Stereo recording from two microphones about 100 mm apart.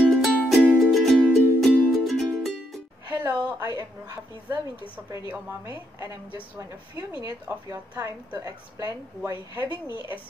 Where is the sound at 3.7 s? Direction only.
30° right (ahead or behind).